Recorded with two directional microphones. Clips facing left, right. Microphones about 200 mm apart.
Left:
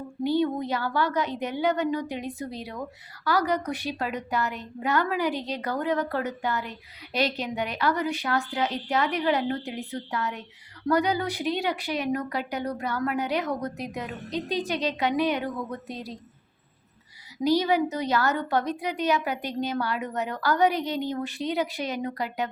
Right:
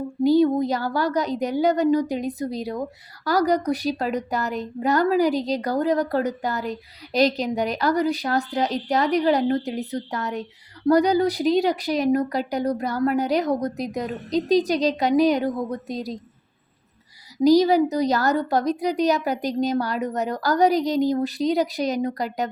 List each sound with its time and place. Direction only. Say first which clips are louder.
0.3 s a woman's voice: right 7 dB; 40° right (ahead or behind)
17.3 s a woman's voice: right 7 dB; 40° right (ahead or behind)